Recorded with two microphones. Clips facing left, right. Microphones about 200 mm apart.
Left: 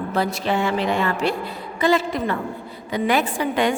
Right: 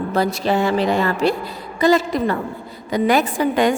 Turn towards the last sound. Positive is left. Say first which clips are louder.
# right 4 dB
turn(degrees=-40)  # may be behind; listen again after turning